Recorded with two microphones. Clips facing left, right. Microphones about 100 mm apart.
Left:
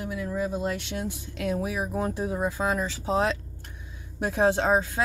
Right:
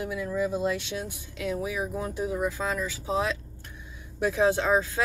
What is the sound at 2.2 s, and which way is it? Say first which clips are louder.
Speech: right 4 dB; 35° left (ahead or behind).